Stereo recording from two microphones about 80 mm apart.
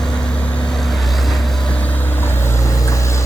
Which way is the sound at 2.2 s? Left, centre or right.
Left.